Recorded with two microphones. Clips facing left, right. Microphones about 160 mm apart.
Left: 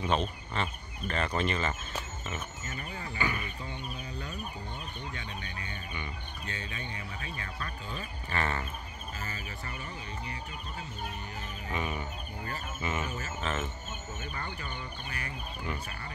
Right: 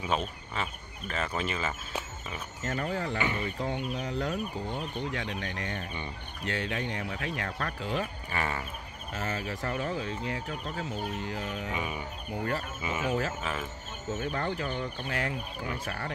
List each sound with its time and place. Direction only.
0.0 s speech: 5° right (ahead or behind)
2.6 s speech: 70° right (ahead or behind)
3.2 s speech: 25° right (ahead or behind)
3.5 s speech: 90° right
8.3 s speech: 10° right (ahead or behind)
9.1 s speech: 75° right (ahead or behind); by 11.7 s 90° right
11.7 s speech: 10° right (ahead or behind)
13.0 s speech: 90° right
13.4 s speech: 5° right (ahead or behind)
14.1 s speech: 70° right (ahead or behind); by 16.1 s 90° right